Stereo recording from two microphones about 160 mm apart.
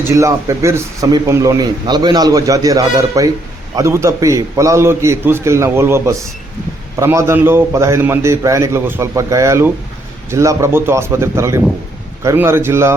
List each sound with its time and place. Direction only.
0.1 s a man's voice: 20° right (ahead or behind)